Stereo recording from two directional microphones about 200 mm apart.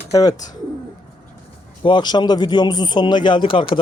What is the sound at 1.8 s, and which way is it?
Speech, 20° left (ahead or behind).